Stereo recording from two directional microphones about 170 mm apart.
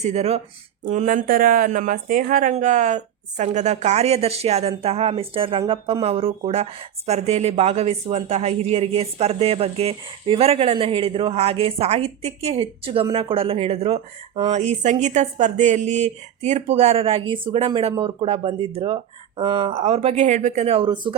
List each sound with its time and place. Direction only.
0.0 s a woman's voice: 40° right (ahead or behind)
14.5 s a woman's voice: 40° right (ahead or behind)